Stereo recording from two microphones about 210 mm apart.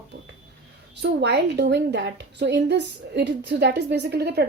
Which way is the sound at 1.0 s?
55° right (ahead or behind).